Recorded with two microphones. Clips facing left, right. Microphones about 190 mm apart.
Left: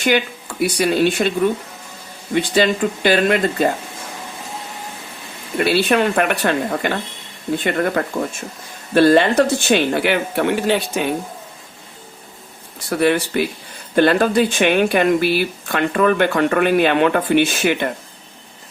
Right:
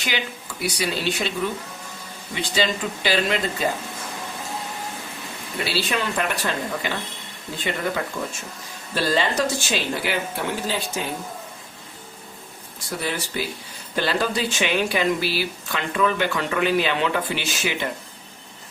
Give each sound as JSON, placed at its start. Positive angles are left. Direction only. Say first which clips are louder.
{"t": 0.0, "sound": "speech", "louder": "left 10 dB", "side_deg": 55}
{"t": 2.3, "sound": "speech", "louder": "left 8 dB", "side_deg": 55}
{"t": 5.5, "sound": "speech", "louder": "left 10 dB", "side_deg": 55}
{"t": 12.9, "sound": "speech", "louder": "left 11 dB", "side_deg": 65}